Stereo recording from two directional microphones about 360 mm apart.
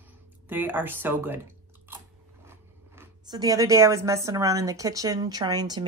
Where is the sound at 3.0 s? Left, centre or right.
Centre.